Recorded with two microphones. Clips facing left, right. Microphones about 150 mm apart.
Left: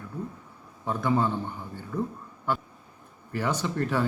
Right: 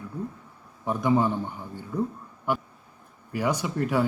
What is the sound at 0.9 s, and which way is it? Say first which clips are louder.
Speech: right 3 dB; 15° right (ahead or behind).